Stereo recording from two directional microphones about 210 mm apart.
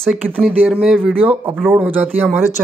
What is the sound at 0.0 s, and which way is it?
Speech, 5° right (ahead or behind).